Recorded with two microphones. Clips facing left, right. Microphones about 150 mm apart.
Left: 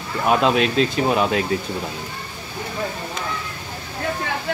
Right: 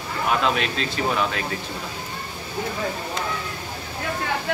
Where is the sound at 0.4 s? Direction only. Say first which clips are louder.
Left 6 dB; 40° left (ahead or behind).